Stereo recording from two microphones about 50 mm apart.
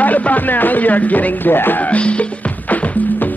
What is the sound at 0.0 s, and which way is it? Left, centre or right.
Music, left.